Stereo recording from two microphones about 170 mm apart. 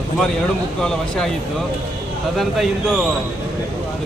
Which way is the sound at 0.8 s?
5° left (ahead or behind).